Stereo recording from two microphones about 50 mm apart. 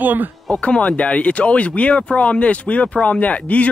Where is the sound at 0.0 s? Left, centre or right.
Right.